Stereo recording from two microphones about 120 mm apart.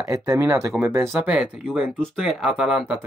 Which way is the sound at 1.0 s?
5° right (ahead or behind).